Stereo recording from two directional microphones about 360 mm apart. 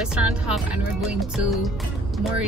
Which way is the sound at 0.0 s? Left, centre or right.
Centre.